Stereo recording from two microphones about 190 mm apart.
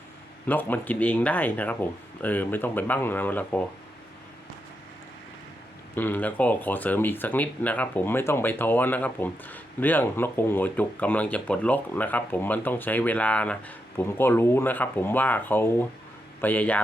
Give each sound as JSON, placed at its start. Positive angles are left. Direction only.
{"t": 0.4, "sound": "speech", "side_deg": 10}
{"t": 5.9, "sound": "speech", "side_deg": 10}